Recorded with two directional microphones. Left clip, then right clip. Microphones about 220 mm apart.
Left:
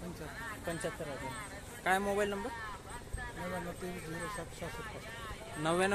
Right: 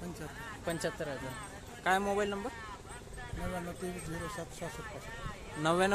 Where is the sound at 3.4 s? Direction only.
45° right (ahead or behind).